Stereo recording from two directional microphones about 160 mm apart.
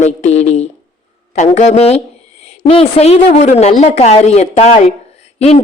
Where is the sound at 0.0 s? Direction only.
45° left (ahead or behind).